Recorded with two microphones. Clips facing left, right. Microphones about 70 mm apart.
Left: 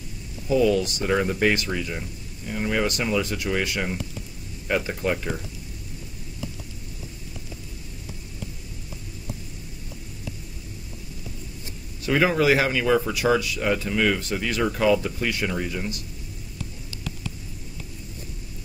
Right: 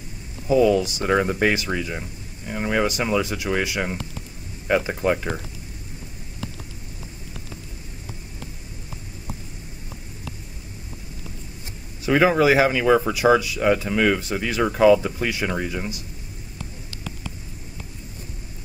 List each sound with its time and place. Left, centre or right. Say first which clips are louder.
0.5 s speech: right 3 dB; centre
12.1 s speech: right 3 dB; centre